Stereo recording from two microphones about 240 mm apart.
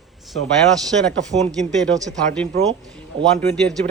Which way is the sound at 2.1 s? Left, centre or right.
Centre.